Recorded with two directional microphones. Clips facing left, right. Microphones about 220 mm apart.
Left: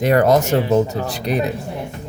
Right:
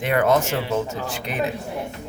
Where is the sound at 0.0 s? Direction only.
40° left (ahead or behind).